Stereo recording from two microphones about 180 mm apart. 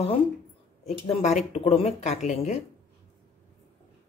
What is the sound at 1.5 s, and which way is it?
Speech, 35° left (ahead or behind).